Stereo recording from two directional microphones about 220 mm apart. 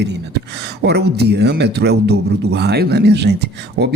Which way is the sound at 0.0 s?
50° right (ahead or behind).